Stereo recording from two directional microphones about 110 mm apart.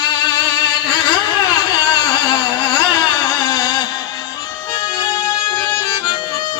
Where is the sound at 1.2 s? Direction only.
45° left (ahead or behind).